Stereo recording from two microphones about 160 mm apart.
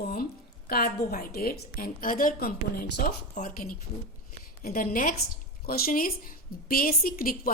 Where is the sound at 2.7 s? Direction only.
75° left (ahead or behind).